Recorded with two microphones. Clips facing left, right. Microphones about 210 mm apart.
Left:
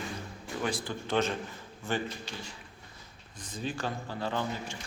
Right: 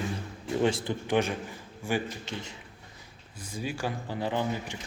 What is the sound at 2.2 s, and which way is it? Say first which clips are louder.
Speech: right 4 dB; 25° right (ahead or behind).